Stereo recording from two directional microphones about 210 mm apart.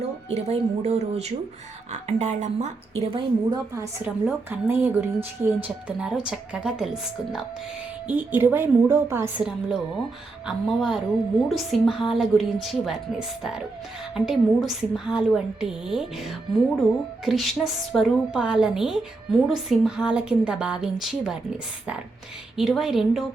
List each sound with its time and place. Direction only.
0.3 s a woman's voice: 30° right (ahead or behind)
4.0 s a woman's voice: 10° right (ahead or behind)
17.2 s speech: centre (ahead or behind)
22.5 s speech: centre (ahead or behind)